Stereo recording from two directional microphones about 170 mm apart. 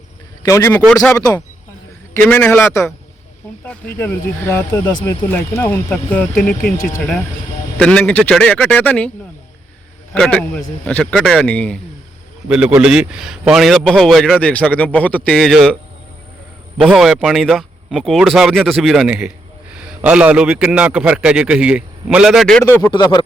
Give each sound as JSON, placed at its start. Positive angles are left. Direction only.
{"t": 0.4, "sound": "speech", "side_deg": 15}
{"t": 2.1, "sound": "speech", "side_deg": 10}
{"t": 7.8, "sound": "speech", "side_deg": 5}
{"t": 12.5, "sound": "a man's voice", "side_deg": -5}
{"t": 16.8, "sound": "a man's voice", "side_deg": -5}
{"t": 22.9, "sound": "speech", "side_deg": 25}